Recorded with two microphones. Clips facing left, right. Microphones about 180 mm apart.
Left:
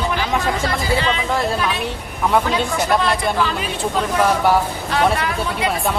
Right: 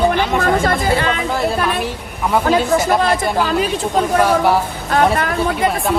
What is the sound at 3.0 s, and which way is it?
Speech, 45° right (ahead or behind).